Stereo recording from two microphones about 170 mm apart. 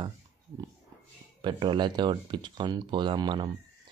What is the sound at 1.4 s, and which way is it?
Speech, 30° right (ahead or behind).